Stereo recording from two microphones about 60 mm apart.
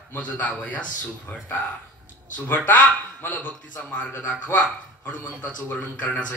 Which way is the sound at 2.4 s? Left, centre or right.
Left.